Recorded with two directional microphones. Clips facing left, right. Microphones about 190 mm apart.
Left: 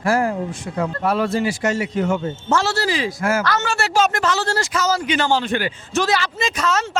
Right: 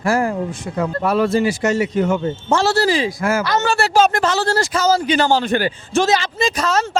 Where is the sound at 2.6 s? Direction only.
35° right (ahead or behind).